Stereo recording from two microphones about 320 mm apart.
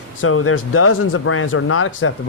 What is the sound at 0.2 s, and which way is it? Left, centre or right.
A man's voice, left.